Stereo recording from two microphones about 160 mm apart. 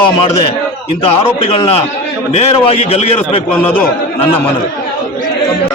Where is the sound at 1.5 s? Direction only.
40° left (ahead or behind).